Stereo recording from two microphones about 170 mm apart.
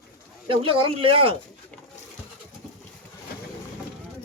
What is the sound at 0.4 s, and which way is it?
Speech, 30° right (ahead or behind).